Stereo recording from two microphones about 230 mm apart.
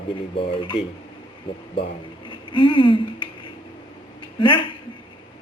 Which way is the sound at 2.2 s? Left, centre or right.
Left.